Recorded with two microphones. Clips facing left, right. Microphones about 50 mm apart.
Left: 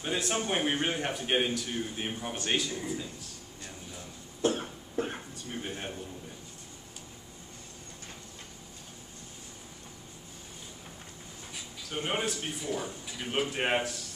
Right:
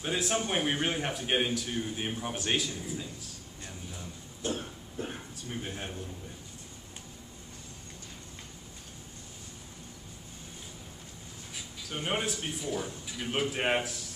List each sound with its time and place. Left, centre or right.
0.0 s a man's voice: centre
4.5 s cough: left
5.3 s speech: centre
11.5 s speech: centre